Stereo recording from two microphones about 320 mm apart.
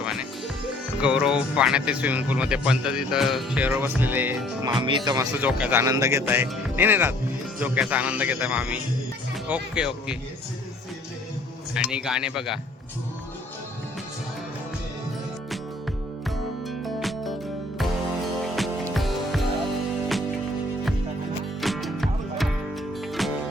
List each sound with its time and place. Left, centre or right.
0.0 s music: centre
1.0 s speech: centre
4.8 s speech: centre
11.7 s speech: centre
17.0 s music: centre
21.6 s music: centre